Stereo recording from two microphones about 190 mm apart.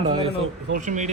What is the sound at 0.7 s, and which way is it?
Speech, 40° right (ahead or behind).